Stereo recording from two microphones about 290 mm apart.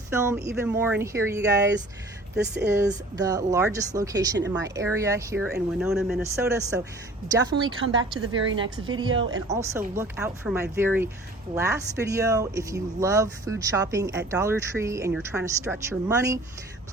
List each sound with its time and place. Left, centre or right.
0.1 s speech: centre
2.3 s speech: right
3.2 s speech: centre
8.3 s speech: right
8.6 s speech: centre